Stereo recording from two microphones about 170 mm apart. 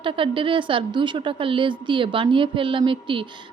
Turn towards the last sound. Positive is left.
turn(degrees=-30)  # may be behind; listen again after turning